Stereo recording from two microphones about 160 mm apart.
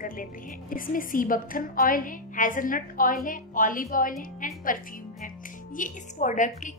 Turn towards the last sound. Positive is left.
turn(degrees=50)  # may be behind; listen again after turning